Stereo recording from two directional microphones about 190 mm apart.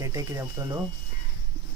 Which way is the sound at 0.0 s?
15° right (ahead or behind).